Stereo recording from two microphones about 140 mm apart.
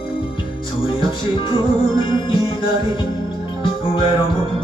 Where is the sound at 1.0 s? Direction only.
35° left (ahead or behind).